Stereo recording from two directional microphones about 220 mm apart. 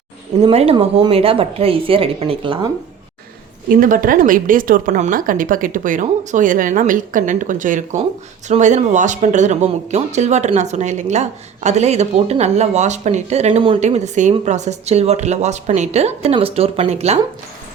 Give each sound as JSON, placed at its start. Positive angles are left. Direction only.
{"t": 0.4, "sound": "speech", "side_deg": -25}
{"t": 3.7, "sound": "speech", "side_deg": -40}